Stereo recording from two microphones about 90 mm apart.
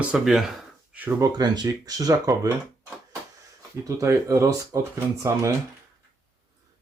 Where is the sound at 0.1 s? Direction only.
5° right (ahead or behind).